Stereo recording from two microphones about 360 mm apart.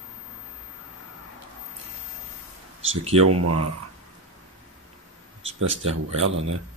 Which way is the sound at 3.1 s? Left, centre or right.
Right.